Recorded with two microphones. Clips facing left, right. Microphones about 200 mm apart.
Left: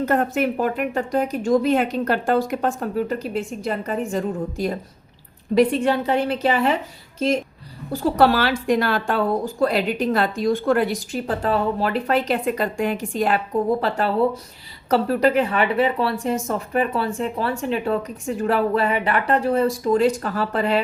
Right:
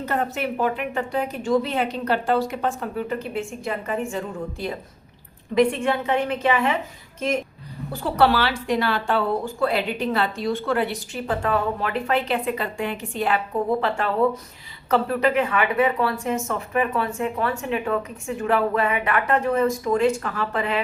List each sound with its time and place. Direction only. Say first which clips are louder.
0.0 s a woman's voice: left 5 dB; 45° left (ahead or behind)
8.0 s a woman's voice: left 2 dB; 45° left (ahead or behind)